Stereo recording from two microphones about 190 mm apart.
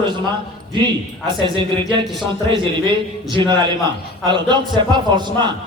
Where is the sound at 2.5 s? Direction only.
25° right (ahead or behind).